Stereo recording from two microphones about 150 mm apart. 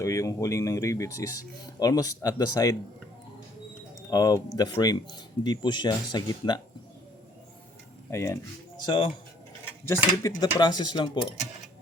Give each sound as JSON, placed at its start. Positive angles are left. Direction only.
{"t": 0.0, "sound": "speech", "side_deg": 20}
{"t": 4.1, "sound": "speech", "side_deg": 25}
{"t": 8.1, "sound": "speech", "side_deg": 20}
{"t": 8.9, "sound": "speech", "side_deg": 35}
{"t": 10.2, "sound": "speech", "side_deg": 25}